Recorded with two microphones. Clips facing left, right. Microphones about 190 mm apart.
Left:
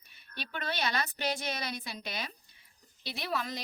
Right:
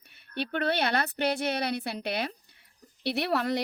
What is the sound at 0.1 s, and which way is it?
A woman's voice, 65° right (ahead or behind).